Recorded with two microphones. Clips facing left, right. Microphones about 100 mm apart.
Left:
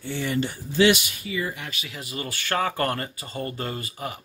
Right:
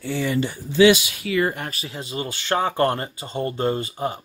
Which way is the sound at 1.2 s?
75° right (ahead or behind).